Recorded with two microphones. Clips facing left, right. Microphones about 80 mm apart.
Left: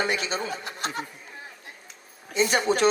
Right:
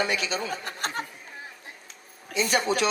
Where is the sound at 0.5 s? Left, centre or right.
Right.